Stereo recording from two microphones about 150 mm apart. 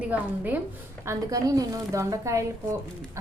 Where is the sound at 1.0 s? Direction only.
20° right (ahead or behind).